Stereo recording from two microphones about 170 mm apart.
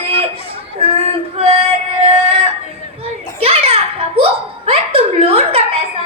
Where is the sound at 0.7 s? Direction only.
35° right (ahead or behind).